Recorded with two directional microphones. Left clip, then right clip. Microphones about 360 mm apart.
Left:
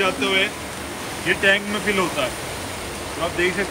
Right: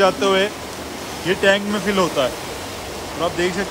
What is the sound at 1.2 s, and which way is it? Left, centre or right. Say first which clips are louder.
Speech: right 1 dB; right.